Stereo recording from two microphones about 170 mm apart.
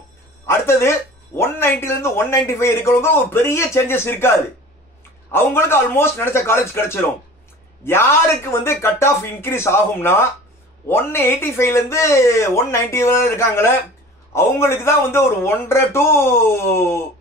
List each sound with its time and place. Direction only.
0.5 s speech: 15° left (ahead or behind)